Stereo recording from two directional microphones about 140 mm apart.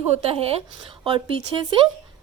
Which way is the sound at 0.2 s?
45° right (ahead or behind).